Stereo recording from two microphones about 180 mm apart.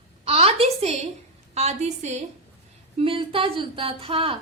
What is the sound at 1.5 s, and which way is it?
A woman's voice, 40° right (ahead or behind).